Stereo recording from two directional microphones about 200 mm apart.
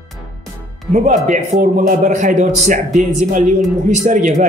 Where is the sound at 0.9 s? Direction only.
40° right (ahead or behind).